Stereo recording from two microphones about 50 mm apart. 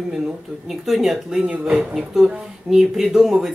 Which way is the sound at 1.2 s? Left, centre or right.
Centre.